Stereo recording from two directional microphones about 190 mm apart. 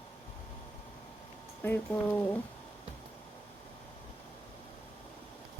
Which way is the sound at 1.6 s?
10° left (ahead or behind).